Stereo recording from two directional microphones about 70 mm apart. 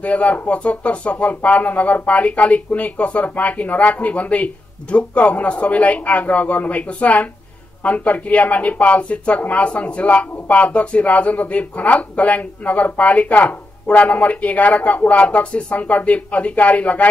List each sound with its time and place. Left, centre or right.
0.0 s speech: centre